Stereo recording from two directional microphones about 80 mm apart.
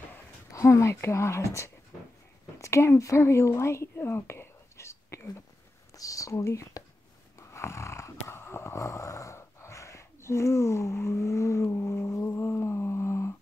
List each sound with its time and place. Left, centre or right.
0.5 s speech: left
2.6 s speech: left
7.3 s a sound: left
11.6 s humming: left